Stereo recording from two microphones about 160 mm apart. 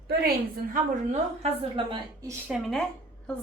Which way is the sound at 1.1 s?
40° right (ahead or behind).